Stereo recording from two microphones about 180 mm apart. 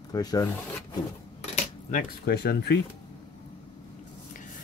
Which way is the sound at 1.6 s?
45° left (ahead or behind).